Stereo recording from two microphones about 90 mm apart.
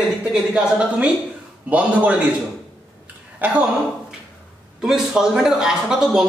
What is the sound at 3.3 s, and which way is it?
Speech, 15° right (ahead or behind).